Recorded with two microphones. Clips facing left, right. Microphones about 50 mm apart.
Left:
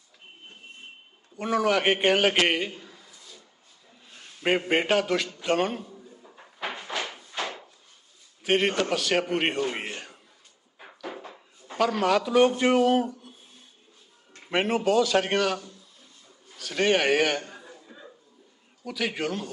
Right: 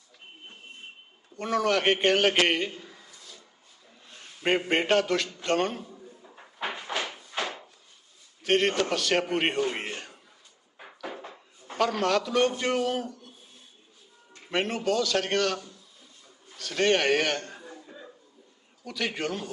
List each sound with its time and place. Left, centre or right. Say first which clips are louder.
1.4 s a man's voice: left 2 dB; centre
4.4 s a man's voice: left 1 dB; centre
6.7 s door: even; centre
7.0 s a sound: even; right
8.4 s a man's voice: even; centre
11.8 s a man's voice: left 2 dB; centre
14.5 s a man's voice: left 4 dB; centre
18.9 s a man's voice: left 2 dB; centre